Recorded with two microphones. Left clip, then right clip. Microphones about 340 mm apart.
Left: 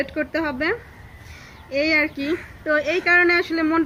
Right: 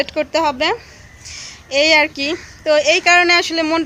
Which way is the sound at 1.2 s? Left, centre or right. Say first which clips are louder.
Right 9 dB; right.